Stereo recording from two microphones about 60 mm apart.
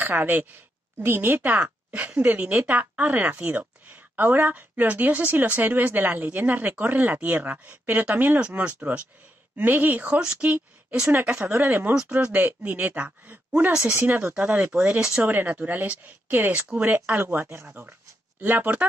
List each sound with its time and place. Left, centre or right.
0.0 s a woman's voice: right
12.2 s speech: right
15.0 s speech: centre
15.2 s a woman's voice: right